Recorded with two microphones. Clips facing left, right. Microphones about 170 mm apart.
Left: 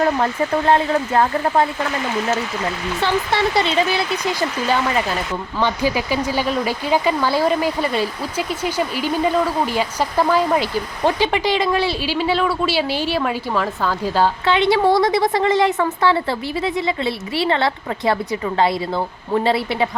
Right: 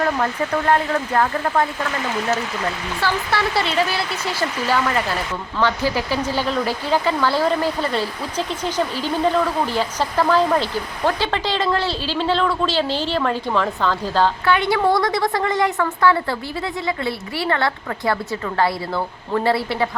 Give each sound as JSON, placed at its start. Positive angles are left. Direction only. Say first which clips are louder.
{"t": 0.7, "sound": "a woman's voice", "louder": "left 2 dB", "side_deg": 20}
{"t": 3.0, "sound": "a woman's voice", "louder": "left 3 dB", "side_deg": 20}
{"t": 14.4, "sound": "a woman's voice", "louder": "left 2 dB", "side_deg": 25}